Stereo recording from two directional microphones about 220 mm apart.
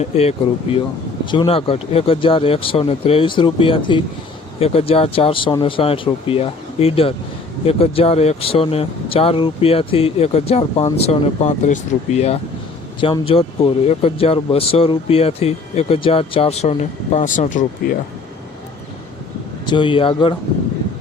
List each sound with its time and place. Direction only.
0.0 s speech: 30° left (ahead or behind)
19.6 s speech: 20° left (ahead or behind)